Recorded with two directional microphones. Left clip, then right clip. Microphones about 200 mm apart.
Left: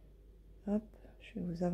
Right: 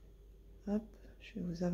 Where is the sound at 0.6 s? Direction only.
20° left (ahead or behind).